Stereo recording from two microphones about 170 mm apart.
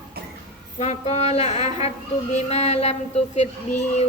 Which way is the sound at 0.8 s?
40° left (ahead or behind).